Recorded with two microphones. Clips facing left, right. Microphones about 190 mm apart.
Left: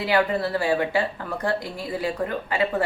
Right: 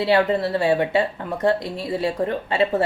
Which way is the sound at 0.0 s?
25° right (ahead or behind).